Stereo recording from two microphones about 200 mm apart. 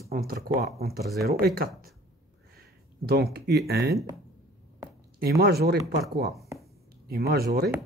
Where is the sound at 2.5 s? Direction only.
50° right (ahead or behind).